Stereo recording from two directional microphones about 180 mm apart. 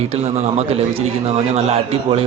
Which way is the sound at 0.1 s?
35° right (ahead or behind).